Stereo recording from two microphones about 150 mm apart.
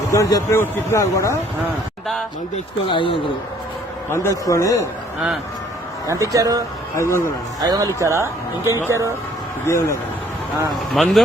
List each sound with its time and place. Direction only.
0.1 s a man's voice: 20° left (ahead or behind)
2.8 s speech: 35° left (ahead or behind)
4.1 s a man's voice: 20° left (ahead or behind)
6.1 s speech: 20° right (ahead or behind)
6.9 s a man's voice: 20° left (ahead or behind)
7.6 s speech: 25° right (ahead or behind)
9.6 s a man's voice: 20° left (ahead or behind)
10.9 s speech: centre (ahead or behind)